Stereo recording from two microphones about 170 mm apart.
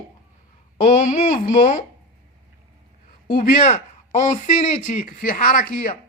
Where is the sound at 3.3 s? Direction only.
45° left (ahead or behind).